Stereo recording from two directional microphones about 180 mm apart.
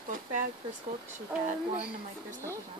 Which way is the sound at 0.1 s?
45° right (ahead or behind).